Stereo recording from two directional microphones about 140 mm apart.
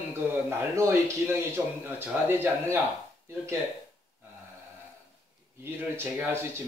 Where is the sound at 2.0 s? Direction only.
15° right (ahead or behind).